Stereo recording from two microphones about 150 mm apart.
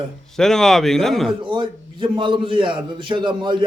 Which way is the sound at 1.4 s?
35° right (ahead or behind).